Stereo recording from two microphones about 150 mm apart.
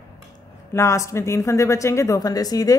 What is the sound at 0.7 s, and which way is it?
Speech, 20° left (ahead or behind).